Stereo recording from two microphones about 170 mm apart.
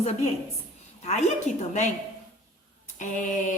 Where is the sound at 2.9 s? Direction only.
50° left (ahead or behind).